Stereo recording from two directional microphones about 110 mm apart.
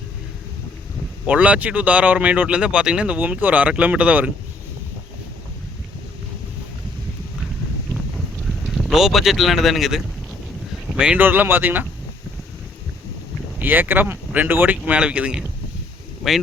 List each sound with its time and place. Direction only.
1.3 s speech: 15° right (ahead or behind)
8.4 s speech: centre (ahead or behind); by 11.9 s 15° right (ahead or behind)
13.6 s speech: 15° right (ahead or behind); by 16.4 s centre (ahead or behind)